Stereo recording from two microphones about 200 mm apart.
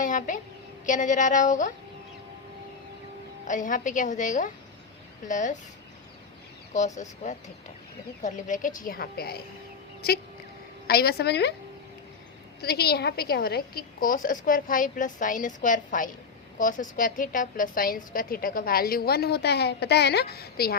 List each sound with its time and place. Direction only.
0.0 s a sound: 40° left (ahead or behind)
0.9 s a woman's voice: 40° left (ahead or behind)
3.4 s a woman's voice: 40° left (ahead or behind)
6.7 s a woman's voice: 35° left (ahead or behind); by 11.5 s 55° left (ahead or behind)
12.5 s a woman's voice: 50° left (ahead or behind)